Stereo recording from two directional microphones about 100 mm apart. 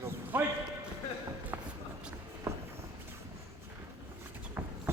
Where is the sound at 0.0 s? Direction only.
20° right (ahead or behind).